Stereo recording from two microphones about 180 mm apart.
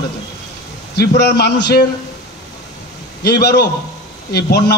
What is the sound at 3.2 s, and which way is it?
A man's voice, 60° left (ahead or behind).